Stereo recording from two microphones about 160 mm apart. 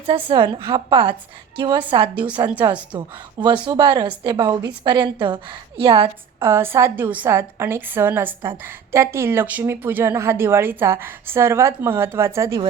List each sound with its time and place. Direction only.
0.3 s a woman's voice: 30° right (ahead or behind)
2.1 s a woman's voice: 10° right (ahead or behind)
3.4 s a woman's voice: 30° right (ahead or behind)
6.4 s a woman's voice: 15° right (ahead or behind)